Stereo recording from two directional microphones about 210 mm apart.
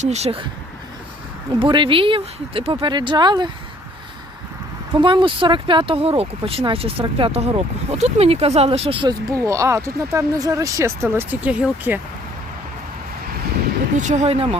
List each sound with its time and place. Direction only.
0.0 s speech: 30° right (ahead or behind)
1.5 s speech: 25° right (ahead or behind)
4.9 s speech: 20° right (ahead or behind); by 11.9 s 5° right (ahead or behind)
13.9 s speech: 35° right (ahead or behind)